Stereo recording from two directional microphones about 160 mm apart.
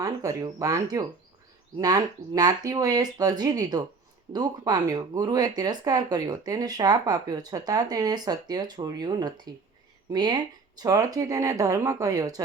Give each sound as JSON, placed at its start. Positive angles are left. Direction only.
{"t": 0.0, "sound": "speech", "side_deg": -20}